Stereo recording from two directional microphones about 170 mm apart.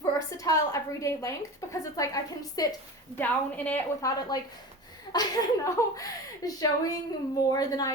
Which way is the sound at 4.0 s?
20° left (ahead or behind).